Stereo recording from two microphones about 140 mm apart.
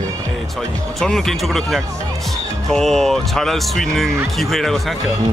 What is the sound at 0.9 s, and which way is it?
Speech, 5° left (ahead or behind).